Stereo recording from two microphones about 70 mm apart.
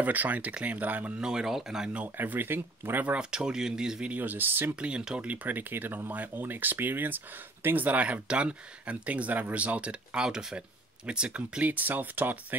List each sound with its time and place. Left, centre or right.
0.0 s speech: right
1.2 s speech: centre
1.9 s speech: right
3.1 s speech: centre
4.1 s speech: right
4.7 s speech: centre